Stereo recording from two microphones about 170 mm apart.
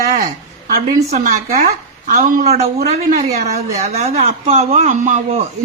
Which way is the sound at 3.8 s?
40° right (ahead or behind).